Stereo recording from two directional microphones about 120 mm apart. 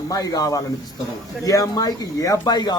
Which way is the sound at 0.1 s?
30° left (ahead or behind).